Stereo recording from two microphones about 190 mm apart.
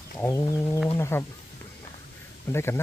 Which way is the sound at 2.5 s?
15° left (ahead or behind).